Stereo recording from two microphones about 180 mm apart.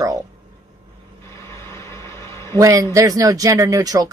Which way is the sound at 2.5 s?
20° right (ahead or behind).